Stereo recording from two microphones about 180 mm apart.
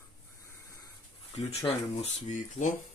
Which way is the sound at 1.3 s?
40° left (ahead or behind).